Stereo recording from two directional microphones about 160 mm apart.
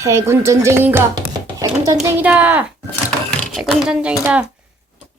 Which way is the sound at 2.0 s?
10° right (ahead or behind).